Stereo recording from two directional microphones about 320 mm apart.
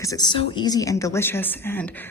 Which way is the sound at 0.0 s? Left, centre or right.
Centre.